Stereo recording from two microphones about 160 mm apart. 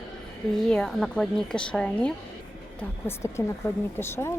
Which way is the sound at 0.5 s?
5° left (ahead or behind).